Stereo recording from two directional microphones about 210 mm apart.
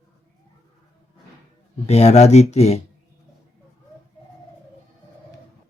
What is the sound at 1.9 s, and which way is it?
Speech, 30° left (ahead or behind).